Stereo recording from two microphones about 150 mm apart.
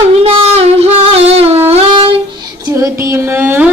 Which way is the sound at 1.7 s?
35° right (ahead or behind).